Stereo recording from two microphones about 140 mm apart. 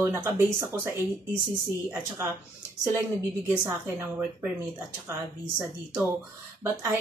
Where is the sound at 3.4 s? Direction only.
20° right (ahead or behind).